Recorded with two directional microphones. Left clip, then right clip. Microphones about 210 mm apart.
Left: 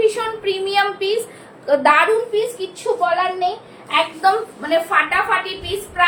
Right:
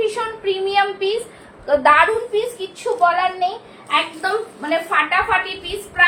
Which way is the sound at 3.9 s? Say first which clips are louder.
Left 3 dB; 10° left (ahead or behind).